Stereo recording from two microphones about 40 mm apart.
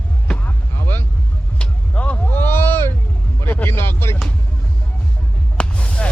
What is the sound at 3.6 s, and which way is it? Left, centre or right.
Music, left.